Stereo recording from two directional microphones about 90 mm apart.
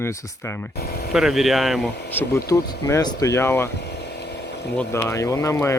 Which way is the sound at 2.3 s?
35° left (ahead or behind).